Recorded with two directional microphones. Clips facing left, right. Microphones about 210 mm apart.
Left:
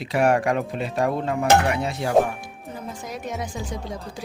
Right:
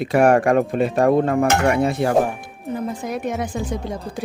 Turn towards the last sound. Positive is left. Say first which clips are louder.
# right 5 dB
turn(degrees=-55)  # may be behind; listen again after turning